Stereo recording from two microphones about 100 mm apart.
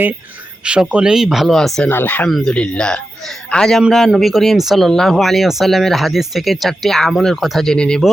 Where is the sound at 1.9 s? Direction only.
20° left (ahead or behind).